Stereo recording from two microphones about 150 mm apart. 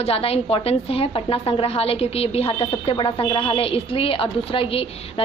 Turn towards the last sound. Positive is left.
turn(degrees=40)  # may be behind; listen again after turning